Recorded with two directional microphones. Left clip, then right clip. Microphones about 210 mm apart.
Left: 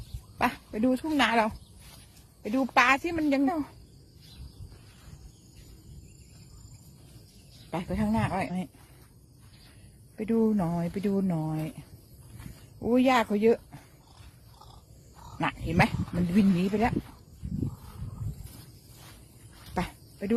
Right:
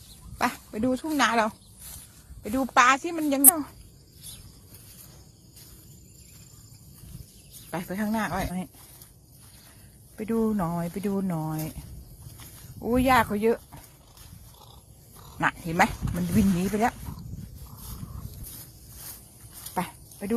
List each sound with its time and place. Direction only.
0.3 s speech: 10° left (ahead or behind)
2.7 s a woman's voice: 10° left (ahead or behind)
7.7 s a woman's voice: 15° left (ahead or behind)
10.2 s speech: 20° left (ahead or behind)
15.4 s a woman's voice: 15° left (ahead or behind)
19.7 s a sound: 25° left (ahead or behind)